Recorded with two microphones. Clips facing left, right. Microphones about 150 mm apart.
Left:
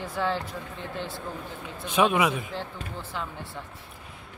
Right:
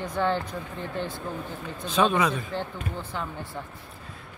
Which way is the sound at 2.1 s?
10° left (ahead or behind).